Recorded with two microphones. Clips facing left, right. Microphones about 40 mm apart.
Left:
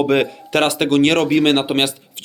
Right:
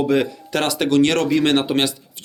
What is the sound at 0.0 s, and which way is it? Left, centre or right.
Speech, left.